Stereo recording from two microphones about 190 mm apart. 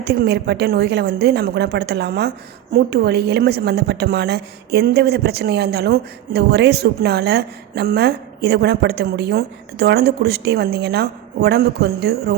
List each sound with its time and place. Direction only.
0.0 s a woman's voice: 55° right (ahead or behind)